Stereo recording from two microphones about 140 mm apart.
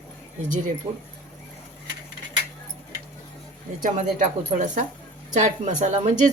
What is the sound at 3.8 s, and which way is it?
A woman's voice, 65° right (ahead or behind).